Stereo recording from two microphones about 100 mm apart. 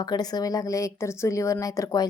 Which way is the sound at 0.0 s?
40° left (ahead or behind).